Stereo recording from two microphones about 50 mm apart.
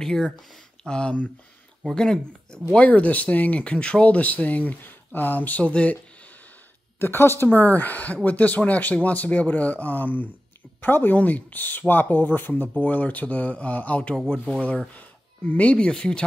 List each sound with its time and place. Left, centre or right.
0.0 s speech: centre
2.9 s speech: left
5.6 s speech: left
7.0 s a woman's voice: left
7.4 s a woman's voice: left
12.6 s speech: left
14.1 s speech: centre
15.0 s a sound: left
15.9 s speech: centre